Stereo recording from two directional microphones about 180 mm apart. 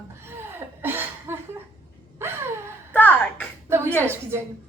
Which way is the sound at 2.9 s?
10° left (ahead or behind).